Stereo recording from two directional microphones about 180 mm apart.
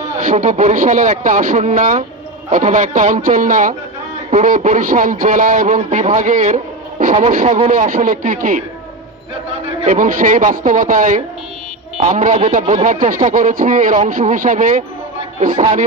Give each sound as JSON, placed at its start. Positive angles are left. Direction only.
{"t": 0.2, "sound": "speech", "side_deg": -45}
{"t": 9.8, "sound": "speech", "side_deg": -45}